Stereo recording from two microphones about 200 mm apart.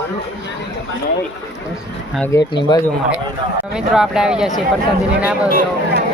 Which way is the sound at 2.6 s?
20° left (ahead or behind).